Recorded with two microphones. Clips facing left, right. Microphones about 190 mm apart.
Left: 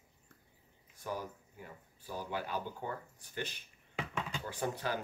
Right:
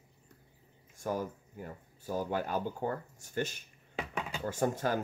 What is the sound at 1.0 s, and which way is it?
Speech, 45° right (ahead or behind).